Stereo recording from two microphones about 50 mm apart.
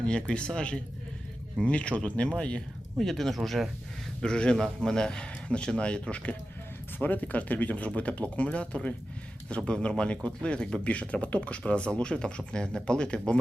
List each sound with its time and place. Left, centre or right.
0.0 s speech: centre
3.0 s speech: centre
4.2 s a man's voice: centre
7.0 s a man's voice: left; by 13.4 s centre